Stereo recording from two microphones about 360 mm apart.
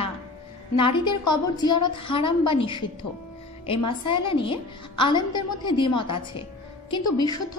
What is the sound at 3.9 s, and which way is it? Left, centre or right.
A woman's voice, centre.